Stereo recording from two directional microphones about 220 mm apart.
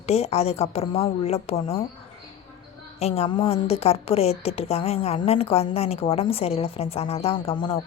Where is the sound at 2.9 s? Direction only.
30° left (ahead or behind).